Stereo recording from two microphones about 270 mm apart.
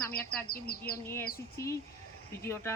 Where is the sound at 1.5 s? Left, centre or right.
Centre.